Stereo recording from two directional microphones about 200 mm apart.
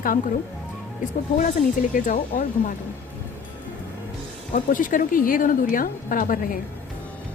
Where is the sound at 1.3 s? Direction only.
40° left (ahead or behind).